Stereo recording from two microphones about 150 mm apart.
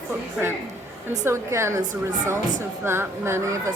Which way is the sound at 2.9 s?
15° right (ahead or behind).